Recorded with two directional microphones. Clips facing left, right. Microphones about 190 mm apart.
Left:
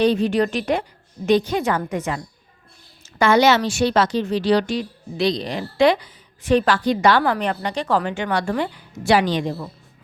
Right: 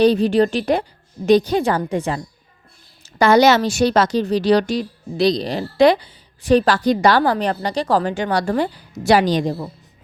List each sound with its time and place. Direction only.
0.0 s a woman's voice: 35° right (ahead or behind)